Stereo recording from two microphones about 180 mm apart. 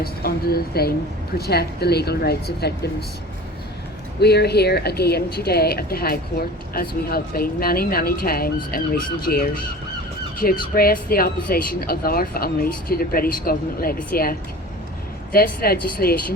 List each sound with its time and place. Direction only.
0.0 s speech: 60° left (ahead or behind)
4.2 s speech: 65° left (ahead or behind)